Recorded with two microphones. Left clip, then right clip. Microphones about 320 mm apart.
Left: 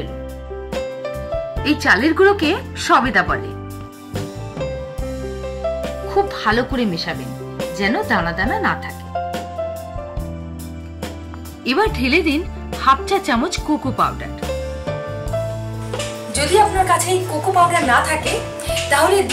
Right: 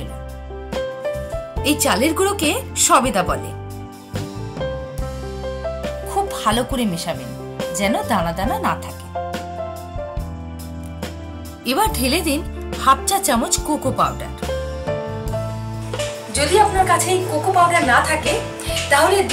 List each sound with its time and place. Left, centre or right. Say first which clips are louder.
1.6 s speech: left 2 dB; right
6.2 s speech: left 1 dB; right
11.6 s speech: left 1 dB; right
15.9 s speech: even; centre